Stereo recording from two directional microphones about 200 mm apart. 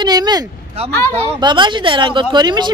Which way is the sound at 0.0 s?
20° right (ahead or behind).